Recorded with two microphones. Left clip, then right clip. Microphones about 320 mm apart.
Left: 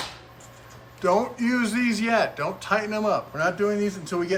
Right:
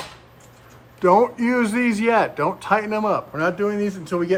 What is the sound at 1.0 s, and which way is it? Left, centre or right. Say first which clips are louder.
Speech: right 6 dB; centre.